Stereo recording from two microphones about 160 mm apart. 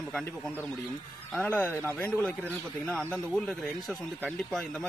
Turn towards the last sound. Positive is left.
turn(degrees=0)  # may be behind; listen again after turning